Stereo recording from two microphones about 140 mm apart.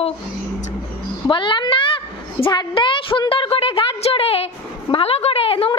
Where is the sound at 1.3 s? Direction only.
35° left (ahead or behind).